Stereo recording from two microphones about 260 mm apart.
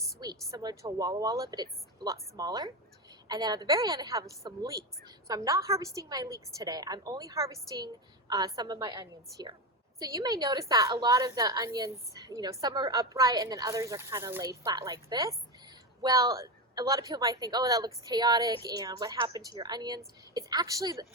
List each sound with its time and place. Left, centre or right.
0.2 s a woman's voice: centre